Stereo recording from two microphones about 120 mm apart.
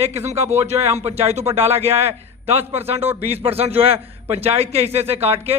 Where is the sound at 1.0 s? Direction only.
60° right (ahead or behind).